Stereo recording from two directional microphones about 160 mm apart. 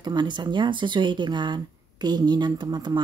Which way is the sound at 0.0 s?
30° right (ahead or behind).